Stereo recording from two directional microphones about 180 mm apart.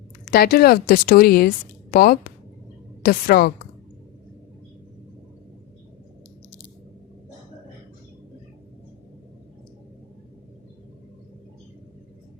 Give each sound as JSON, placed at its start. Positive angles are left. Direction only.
{"t": 0.3, "sound": "a woman's voice", "side_deg": 55}